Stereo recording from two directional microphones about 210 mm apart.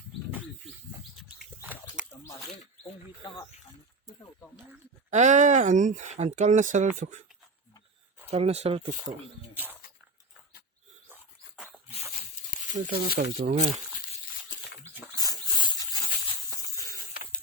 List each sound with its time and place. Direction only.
0.3 s bird: 5° right (ahead or behind)
1.6 s a sound: 10° right (ahead or behind)
5.1 s speech: 35° right (ahead or behind)
8.3 s speech: 30° right (ahead or behind)
11.1 s dog: centre (ahead or behind)
12.7 s speech: 40° right (ahead or behind)
15.1 s dog: 20° left (ahead or behind)